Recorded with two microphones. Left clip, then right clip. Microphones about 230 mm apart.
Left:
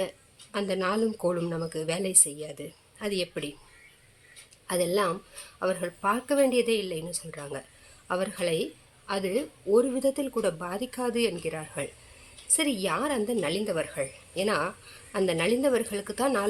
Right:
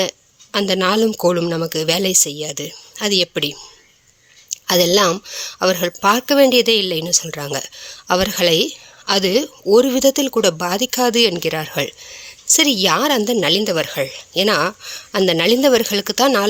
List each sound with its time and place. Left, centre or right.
0.5 s a woman's voice: right
4.6 s a woman's voice: right